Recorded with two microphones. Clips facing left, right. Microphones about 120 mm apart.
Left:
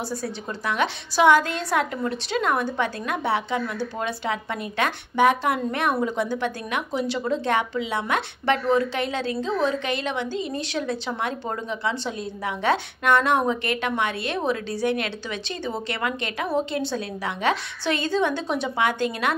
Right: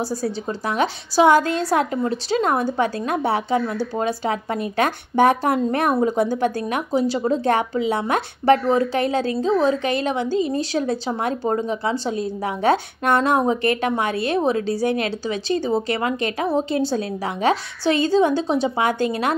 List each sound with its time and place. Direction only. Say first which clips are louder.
0.1 s a woman's voice: right 5 dB; 35° right (ahead or behind)